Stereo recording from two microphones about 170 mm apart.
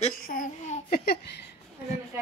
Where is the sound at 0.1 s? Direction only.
55° left (ahead or behind); by 1.4 s 75° left (ahead or behind).